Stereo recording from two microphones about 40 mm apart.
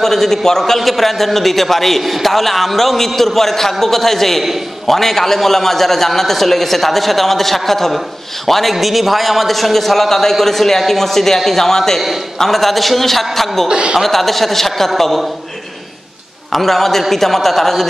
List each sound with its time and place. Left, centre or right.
0.0 s a man's voice: centre
13.7 s speech: right
14.0 s a man's voice: centre
16.5 s a man's voice: centre